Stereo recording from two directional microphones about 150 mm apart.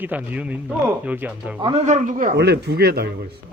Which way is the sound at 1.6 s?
45° right (ahead or behind).